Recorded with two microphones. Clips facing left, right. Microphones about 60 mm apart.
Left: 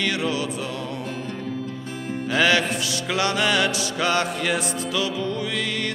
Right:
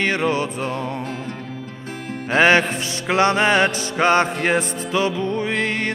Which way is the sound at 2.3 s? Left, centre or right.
Right.